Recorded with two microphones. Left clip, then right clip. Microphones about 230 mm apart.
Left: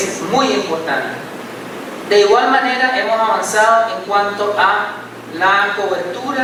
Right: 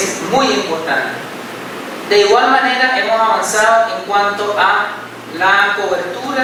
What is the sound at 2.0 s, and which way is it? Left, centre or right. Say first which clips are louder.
A man's voice: right 1 dB; centre.